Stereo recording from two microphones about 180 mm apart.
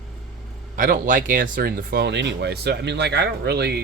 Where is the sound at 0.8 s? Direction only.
50° right (ahead or behind); by 3.8 s 65° right (ahead or behind).